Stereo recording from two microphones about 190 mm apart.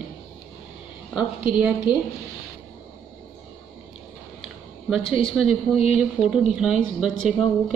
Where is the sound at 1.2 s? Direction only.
5° right (ahead or behind).